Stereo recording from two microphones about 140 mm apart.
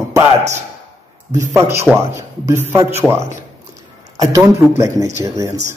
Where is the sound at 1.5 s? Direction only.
20° right (ahead or behind).